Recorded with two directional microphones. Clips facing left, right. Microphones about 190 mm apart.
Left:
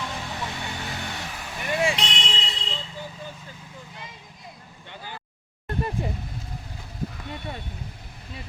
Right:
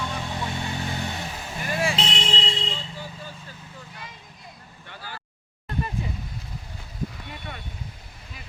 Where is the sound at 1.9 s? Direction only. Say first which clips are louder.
Right 3 dB; 30° right (ahead or behind).